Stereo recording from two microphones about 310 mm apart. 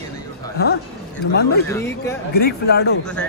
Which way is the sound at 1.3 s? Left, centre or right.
Left.